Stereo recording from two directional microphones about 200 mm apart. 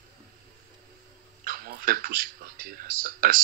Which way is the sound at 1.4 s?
45° right (ahead or behind).